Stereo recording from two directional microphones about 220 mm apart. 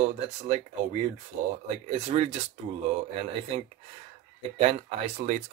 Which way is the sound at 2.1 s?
30° right (ahead or behind).